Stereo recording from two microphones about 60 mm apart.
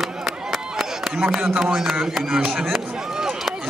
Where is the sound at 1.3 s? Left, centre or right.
Centre.